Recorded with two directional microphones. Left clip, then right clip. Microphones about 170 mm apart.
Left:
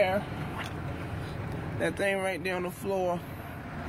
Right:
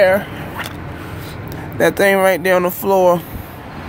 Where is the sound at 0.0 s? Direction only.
55° right (ahead or behind).